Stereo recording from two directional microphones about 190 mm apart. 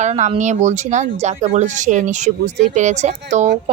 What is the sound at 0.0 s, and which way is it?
Speech, 35° right (ahead or behind).